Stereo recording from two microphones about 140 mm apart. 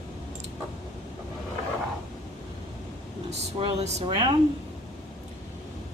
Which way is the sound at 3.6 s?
45° right (ahead or behind).